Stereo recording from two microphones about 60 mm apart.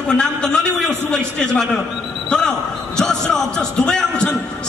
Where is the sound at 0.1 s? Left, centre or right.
Centre.